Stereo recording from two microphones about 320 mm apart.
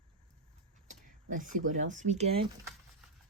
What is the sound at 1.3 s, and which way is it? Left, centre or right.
Speech, right.